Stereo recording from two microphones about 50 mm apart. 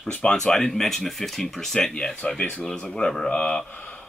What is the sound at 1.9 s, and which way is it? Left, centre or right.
Speech, centre.